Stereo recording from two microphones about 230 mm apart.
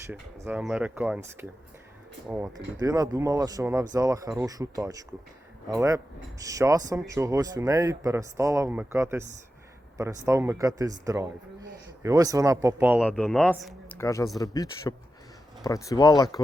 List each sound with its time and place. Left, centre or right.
0.1 s speech: centre
10.2 s speech: centre
13.1 s speech: centre